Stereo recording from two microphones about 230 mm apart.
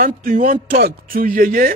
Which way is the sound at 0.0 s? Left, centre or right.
Right.